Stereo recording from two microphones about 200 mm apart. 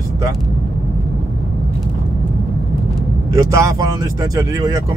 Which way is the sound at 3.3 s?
15° right (ahead or behind).